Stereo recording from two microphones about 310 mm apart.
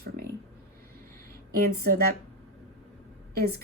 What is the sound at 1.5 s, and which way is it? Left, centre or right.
Speech, right.